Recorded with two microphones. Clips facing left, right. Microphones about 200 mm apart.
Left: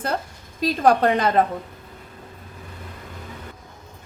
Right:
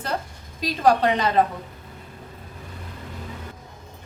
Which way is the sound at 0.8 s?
50° left (ahead or behind).